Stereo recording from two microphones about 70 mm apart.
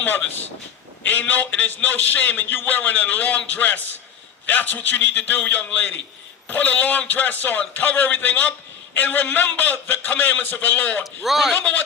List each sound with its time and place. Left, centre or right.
1.0 s a man's voice: left
11.0 s a man's voice: centre